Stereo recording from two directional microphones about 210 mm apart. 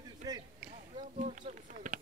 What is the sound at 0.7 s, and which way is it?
Speech, 35° right (ahead or behind).